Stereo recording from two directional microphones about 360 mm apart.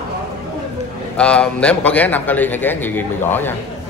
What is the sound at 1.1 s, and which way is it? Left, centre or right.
A man's voice, centre.